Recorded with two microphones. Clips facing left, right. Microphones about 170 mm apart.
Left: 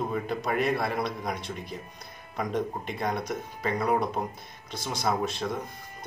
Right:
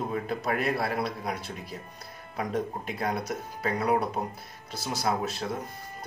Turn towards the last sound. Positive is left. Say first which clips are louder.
# left 1 dB
turn(degrees=-5)  # may be behind; listen again after turning